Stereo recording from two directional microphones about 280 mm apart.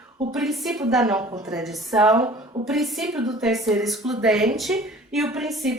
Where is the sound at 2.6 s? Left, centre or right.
Centre.